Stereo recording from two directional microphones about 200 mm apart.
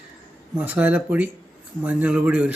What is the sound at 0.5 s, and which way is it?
Speech, 10° right (ahead or behind).